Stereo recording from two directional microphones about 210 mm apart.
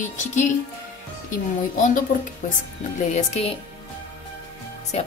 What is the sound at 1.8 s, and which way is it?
Speech, 35° left (ahead or behind).